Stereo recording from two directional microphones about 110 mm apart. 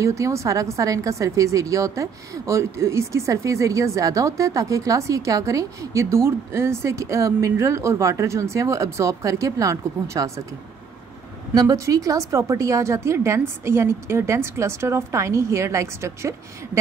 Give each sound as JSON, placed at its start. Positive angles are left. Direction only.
{"t": 0.0, "sound": "a woman's voice", "side_deg": -30}
{"t": 11.5, "sound": "a woman's voice", "side_deg": -30}